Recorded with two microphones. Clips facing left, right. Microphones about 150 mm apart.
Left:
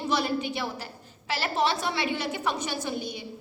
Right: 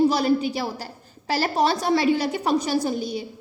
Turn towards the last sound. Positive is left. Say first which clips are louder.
# right 8 dB
turn(degrees=-40)  # may be behind; listen again after turning